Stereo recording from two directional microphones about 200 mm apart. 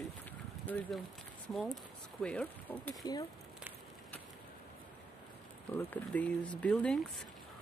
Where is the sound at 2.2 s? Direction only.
5° left (ahead or behind).